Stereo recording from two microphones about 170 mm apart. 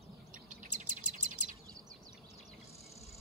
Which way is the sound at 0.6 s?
50° right (ahead or behind).